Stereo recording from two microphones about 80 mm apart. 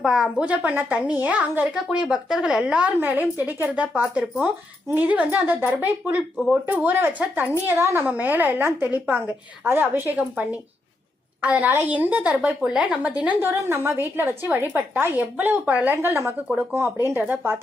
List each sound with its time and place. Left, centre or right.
0.0 s a woman's voice: centre
0.4 s a woman's voice: centre
13.4 s a woman's voice: right